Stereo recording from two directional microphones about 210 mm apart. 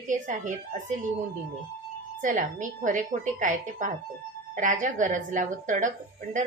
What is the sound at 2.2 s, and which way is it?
Speech, 40° right (ahead or behind).